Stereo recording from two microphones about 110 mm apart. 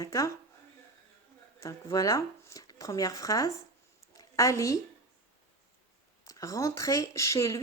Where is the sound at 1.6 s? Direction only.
30° left (ahead or behind).